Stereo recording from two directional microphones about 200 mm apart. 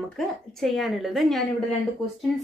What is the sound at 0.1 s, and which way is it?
Speech, centre (ahead or behind).